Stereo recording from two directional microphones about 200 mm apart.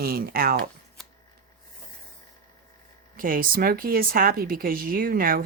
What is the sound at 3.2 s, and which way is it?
A woman's voice, 45° right (ahead or behind).